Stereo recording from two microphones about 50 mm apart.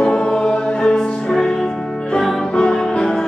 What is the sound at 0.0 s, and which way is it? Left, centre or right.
Music, centre.